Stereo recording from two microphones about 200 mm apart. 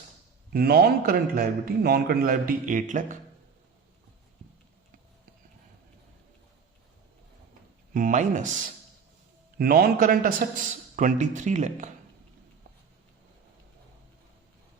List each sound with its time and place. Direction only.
0.5 s a man's voice: 50° right (ahead or behind)
7.9 s a man's voice: 40° right (ahead or behind)
9.6 s a man's voice: 50° right (ahead or behind)